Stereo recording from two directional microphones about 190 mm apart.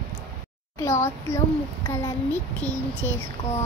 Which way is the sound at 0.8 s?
15° left (ahead or behind).